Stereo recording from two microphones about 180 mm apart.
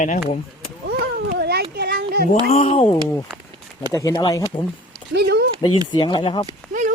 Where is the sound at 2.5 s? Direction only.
35° left (ahead or behind).